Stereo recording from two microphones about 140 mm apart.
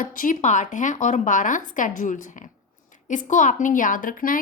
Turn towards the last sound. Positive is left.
turn(degrees=80)